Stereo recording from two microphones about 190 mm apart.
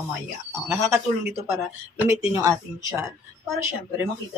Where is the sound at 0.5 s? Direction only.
Centre (ahead or behind).